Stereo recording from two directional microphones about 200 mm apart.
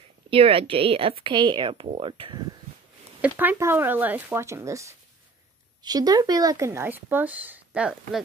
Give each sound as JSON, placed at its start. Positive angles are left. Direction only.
{"t": 0.3, "sound": "speech", "side_deg": -30}
{"t": 3.2, "sound": "speech", "side_deg": -10}